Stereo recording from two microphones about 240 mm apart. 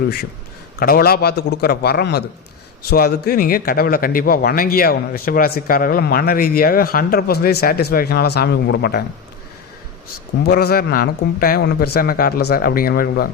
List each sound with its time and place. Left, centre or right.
0.8 s a man's voice: left
10.4 s a man's voice: left